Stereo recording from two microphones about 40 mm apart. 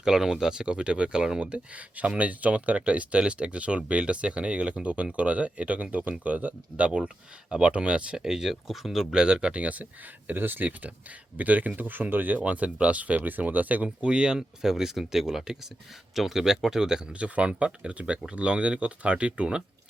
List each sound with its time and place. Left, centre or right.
0.0 s speech: centre
8.2 s speech: centre
8.6 s speech: centre
9.1 s speech: right
9.5 s speech: right
10.7 s speech: right
12.4 s speech: right
13.8 s speech: right
17.1 s speech: right